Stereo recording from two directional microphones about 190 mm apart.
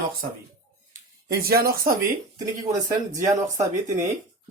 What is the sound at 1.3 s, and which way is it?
Speech, 50° right (ahead or behind).